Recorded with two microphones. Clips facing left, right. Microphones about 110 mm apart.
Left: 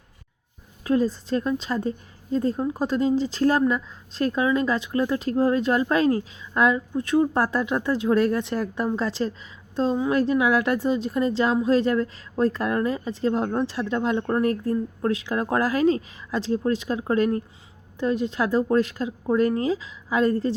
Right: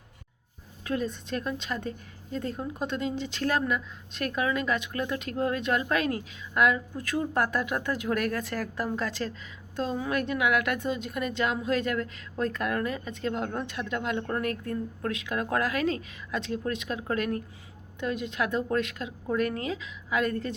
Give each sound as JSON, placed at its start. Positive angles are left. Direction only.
{"t": 0.9, "sound": "a woman's voice", "side_deg": 30}